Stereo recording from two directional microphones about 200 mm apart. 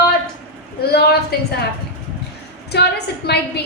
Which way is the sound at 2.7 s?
55° left (ahead or behind).